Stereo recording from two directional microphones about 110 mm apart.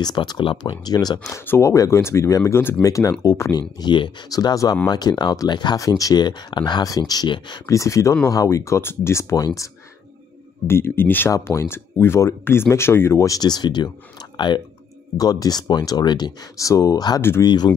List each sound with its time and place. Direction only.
0.0 s speech: 40° left (ahead or behind)
1.3 s speech: 25° left (ahead or behind)
3.8 s speech: 45° left (ahead or behind)
7.6 s speech: 30° left (ahead or behind)
10.7 s speech: 20° left (ahead or behind); by 17.6 s 40° left (ahead or behind)